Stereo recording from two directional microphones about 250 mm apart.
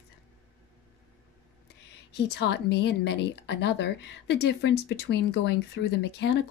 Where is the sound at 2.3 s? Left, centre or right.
Left.